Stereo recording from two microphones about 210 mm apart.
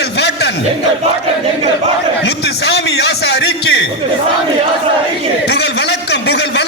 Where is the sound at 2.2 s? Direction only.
55° left (ahead or behind).